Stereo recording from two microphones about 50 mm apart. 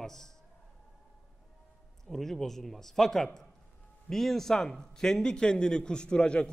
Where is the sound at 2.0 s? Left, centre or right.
Centre.